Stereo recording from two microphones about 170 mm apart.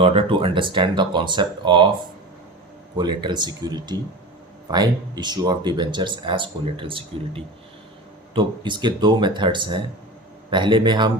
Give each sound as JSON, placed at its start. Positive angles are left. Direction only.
{"t": 0.0, "sound": "speech", "side_deg": -35}
{"t": 2.9, "sound": "speech", "side_deg": -25}